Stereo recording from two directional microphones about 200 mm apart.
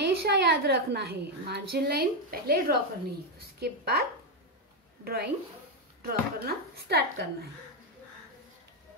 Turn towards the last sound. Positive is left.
turn(degrees=-50)  # may be behind; listen again after turning